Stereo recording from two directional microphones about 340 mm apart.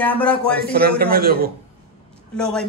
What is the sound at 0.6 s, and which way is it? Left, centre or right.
Speech, right.